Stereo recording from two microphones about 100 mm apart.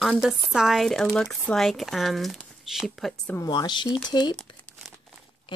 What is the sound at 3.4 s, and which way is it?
Speech, 45° left (ahead or behind).